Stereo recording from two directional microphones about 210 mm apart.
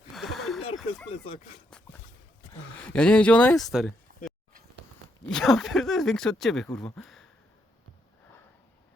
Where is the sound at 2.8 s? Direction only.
5° left (ahead or behind).